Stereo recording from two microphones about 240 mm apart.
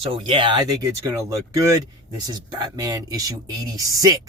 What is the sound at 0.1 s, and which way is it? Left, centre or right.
Speech, right.